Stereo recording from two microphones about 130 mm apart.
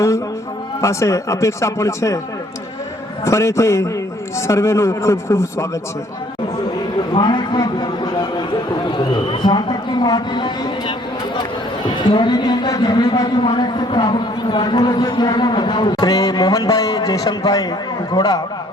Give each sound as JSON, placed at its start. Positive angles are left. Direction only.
{"t": 0.8, "sound": "speech", "side_deg": 20}
{"t": 3.2, "sound": "speech", "side_deg": 20}
{"t": 7.1, "sound": "a sound", "side_deg": 35}
{"t": 9.2, "sound": "speech", "side_deg": 40}
{"t": 12.1, "sound": "a man's voice", "side_deg": 35}